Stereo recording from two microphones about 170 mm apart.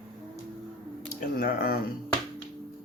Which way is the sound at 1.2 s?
60° left (ahead or behind).